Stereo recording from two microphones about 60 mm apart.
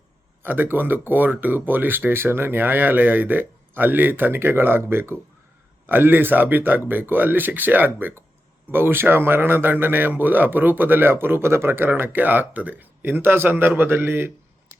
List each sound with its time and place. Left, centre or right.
0.4 s speech: right